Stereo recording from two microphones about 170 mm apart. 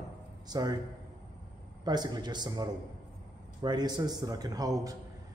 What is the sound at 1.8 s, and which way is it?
A man's voice, 25° right (ahead or behind).